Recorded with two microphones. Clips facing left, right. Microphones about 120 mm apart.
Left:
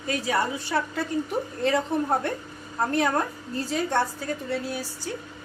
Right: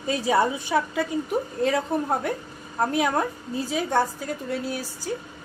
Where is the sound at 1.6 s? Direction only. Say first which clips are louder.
Left 1 dB; 5° right (ahead or behind).